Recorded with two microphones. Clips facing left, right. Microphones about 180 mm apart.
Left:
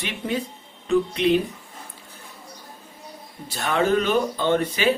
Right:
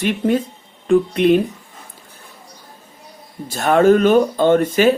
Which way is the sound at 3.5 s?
45° right (ahead or behind).